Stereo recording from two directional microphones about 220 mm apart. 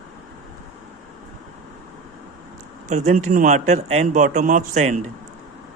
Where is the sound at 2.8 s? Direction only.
30° right (ahead or behind).